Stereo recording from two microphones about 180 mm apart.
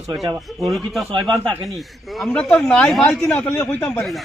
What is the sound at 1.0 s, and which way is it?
Speech, 25° right (ahead or behind).